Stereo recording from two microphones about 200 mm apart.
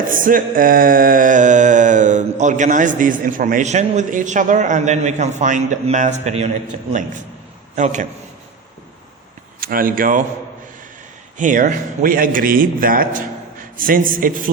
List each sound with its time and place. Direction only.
0.0 s a sound: 45° right (ahead or behind)
9.6 s speech: 45° right (ahead or behind)
11.3 s a man's voice: 40° right (ahead or behind)